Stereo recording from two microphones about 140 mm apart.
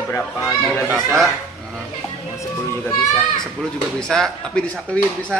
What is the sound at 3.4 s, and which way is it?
A man's voice, 5° left (ahead or behind).